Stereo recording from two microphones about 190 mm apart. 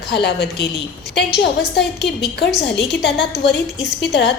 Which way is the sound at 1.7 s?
65° left (ahead or behind).